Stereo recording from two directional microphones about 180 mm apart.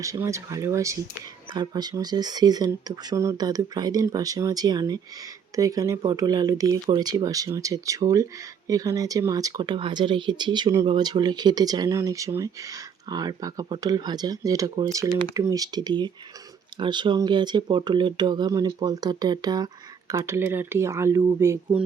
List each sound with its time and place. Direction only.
0.0 s speech: 15° right (ahead or behind)